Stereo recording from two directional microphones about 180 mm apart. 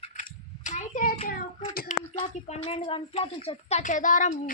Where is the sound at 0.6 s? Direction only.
40° left (ahead or behind).